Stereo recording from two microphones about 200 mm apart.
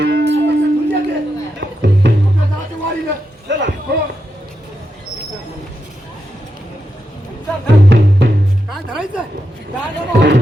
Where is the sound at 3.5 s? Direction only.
60° right (ahead or behind).